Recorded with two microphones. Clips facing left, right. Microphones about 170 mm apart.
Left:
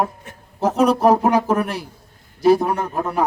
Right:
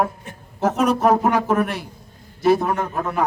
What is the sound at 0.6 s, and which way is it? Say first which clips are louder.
Speech: left 2 dB; 30° left (ahead or behind).